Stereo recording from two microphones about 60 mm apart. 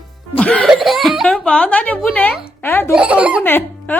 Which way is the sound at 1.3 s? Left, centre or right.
Left.